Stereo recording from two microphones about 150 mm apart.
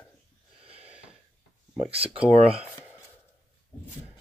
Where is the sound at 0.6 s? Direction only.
40° right (ahead or behind).